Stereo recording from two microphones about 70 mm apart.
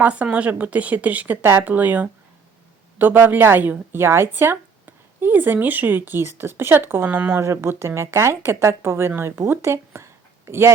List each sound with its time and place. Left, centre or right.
0.0 s speech: centre
7.4 s speech: right